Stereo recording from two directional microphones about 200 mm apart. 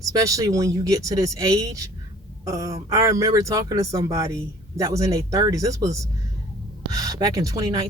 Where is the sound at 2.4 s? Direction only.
15° right (ahead or behind).